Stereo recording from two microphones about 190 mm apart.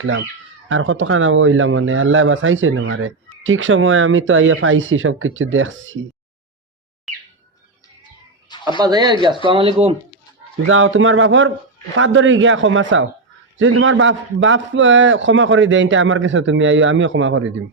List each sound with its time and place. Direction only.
0.0 s speech: 90° right
7.1 s bird: centre (ahead or behind)
8.8 s speech: 20° right (ahead or behind)
10.7 s a man's voice: 90° right